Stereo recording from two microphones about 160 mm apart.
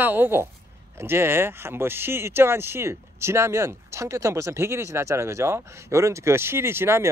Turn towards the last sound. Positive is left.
turn(degrees=-15)  # may be behind; listen again after turning